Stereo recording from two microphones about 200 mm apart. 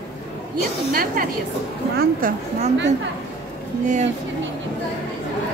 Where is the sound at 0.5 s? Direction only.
45° right (ahead or behind).